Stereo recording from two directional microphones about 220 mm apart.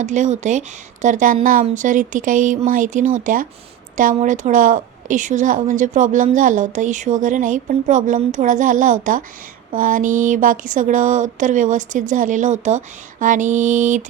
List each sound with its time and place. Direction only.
0.0 s a woman's voice: 35° right (ahead or behind)